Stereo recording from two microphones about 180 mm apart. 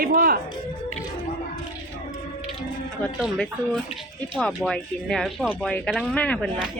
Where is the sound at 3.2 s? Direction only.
5° left (ahead or behind).